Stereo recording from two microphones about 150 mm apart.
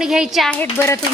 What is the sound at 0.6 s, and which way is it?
Speech, 15° left (ahead or behind).